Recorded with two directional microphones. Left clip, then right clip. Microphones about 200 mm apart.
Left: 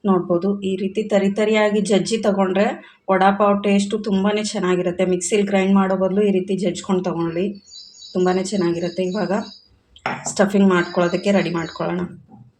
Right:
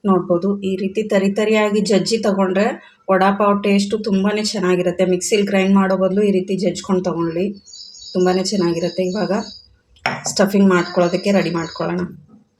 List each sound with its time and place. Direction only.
0.0 s speech: 15° right (ahead or behind)